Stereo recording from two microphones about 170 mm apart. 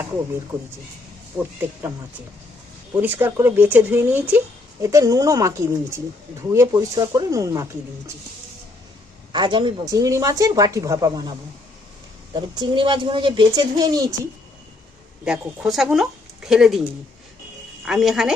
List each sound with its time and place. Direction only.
3.0 s a woman's voice: 10° right (ahead or behind)
9.3 s a woman's voice: 25° right (ahead or behind)
15.2 s speech: 5° right (ahead or behind)